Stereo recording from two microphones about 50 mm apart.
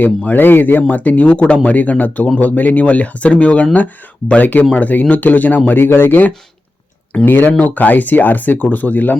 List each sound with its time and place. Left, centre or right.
0.3 s speech: left